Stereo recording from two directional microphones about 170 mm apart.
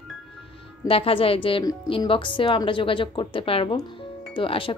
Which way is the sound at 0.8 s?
35° left (ahead or behind).